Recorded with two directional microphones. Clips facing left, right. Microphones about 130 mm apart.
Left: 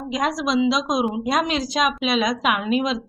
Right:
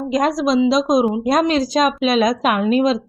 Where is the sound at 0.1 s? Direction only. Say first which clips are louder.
Right 5 dB; 40° right (ahead or behind).